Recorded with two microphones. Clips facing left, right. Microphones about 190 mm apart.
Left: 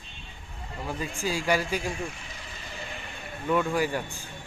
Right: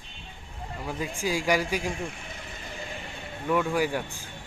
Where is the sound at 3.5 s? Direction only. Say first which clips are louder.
Even; 10° right (ahead or behind).